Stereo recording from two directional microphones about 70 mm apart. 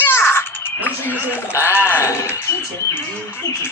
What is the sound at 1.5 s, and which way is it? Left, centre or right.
Speech, left.